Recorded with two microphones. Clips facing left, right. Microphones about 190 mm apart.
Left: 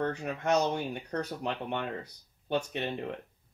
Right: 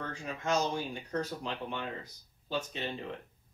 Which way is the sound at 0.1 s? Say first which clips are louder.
Left 4 dB; 65° left (ahead or behind).